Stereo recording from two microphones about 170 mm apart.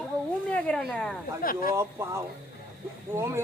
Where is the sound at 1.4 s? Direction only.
55° left (ahead or behind).